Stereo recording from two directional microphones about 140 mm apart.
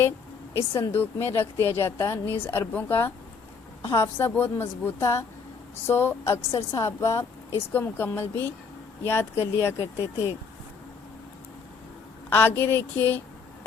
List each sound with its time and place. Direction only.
0.5 s a woman's voice: 20° left (ahead or behind)
12.3 s a woman's voice: 15° left (ahead or behind)